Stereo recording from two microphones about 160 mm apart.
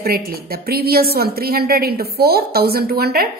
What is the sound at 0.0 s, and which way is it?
A woman's voice, 70° right (ahead or behind).